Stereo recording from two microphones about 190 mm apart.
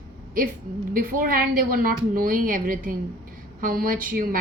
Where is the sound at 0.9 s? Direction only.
50° right (ahead or behind).